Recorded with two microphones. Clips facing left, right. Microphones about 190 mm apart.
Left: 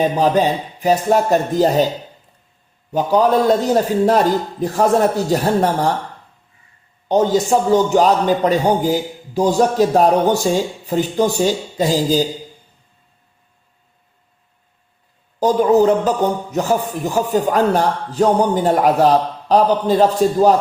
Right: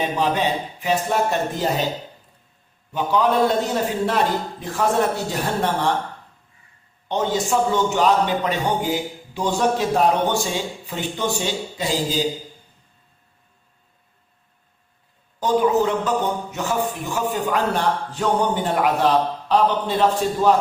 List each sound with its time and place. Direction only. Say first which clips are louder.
0.0 s a man's voice: left 6 dB; 40° left (ahead or behind)
2.9 s a man's voice: left 5 dB; 40° left (ahead or behind)
7.1 s a man's voice: left 7 dB; 40° left (ahead or behind)
15.4 s a man's voice: left 5 dB; 40° left (ahead or behind)